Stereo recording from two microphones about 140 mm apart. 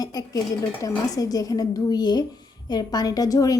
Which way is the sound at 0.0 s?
25° left (ahead or behind).